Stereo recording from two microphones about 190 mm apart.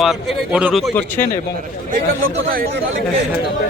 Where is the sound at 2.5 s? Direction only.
50° right (ahead or behind).